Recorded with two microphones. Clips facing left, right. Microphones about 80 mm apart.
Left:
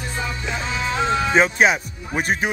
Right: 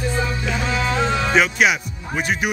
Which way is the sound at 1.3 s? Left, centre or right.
Left.